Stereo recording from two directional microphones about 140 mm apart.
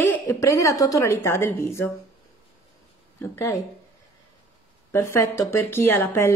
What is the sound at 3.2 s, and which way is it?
Speech, 20° left (ahead or behind).